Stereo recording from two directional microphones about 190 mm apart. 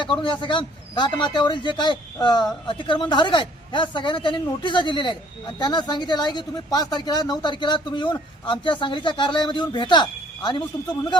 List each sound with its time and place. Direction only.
0.0 s a man's voice: 25° left (ahead or behind)